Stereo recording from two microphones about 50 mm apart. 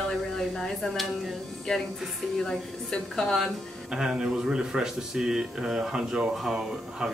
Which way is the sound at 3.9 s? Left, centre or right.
Centre.